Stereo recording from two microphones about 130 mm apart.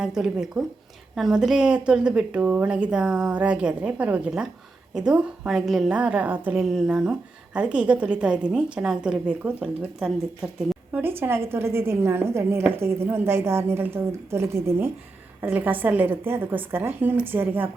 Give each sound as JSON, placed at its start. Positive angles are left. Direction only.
{"t": 0.0, "sound": "a woman's voice", "side_deg": -5}
{"t": 11.0, "sound": "a woman's voice", "side_deg": -15}